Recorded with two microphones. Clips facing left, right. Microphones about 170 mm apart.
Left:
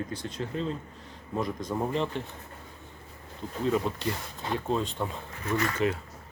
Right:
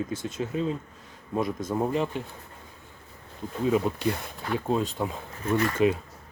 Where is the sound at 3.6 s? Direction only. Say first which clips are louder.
Right 3 dB; 10° right (ahead or behind).